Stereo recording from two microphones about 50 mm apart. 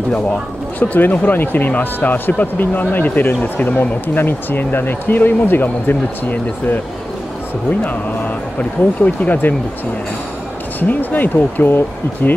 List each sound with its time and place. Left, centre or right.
0.1 s speech: left
7.8 s speech: left
10.8 s speech: left